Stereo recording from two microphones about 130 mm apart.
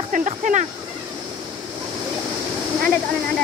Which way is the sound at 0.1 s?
75° right (ahead or behind).